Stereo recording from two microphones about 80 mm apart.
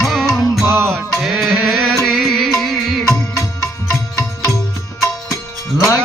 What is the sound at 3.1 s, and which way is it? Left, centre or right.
Music, left.